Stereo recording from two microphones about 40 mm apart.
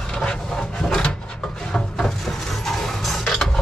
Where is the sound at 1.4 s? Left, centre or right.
Centre.